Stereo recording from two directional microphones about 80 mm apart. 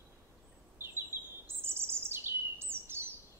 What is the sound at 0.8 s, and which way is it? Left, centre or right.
Bird, right.